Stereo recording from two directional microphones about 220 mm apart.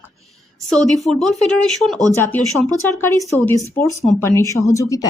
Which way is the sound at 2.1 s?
10° left (ahead or behind).